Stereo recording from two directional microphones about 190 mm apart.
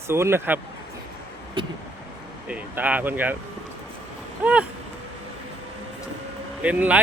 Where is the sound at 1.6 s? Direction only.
25° right (ahead or behind).